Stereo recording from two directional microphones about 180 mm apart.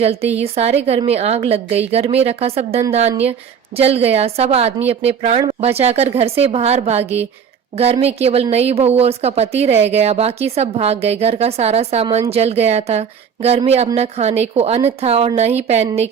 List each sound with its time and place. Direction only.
0.0 s a woman's voice: 35° right (ahead or behind)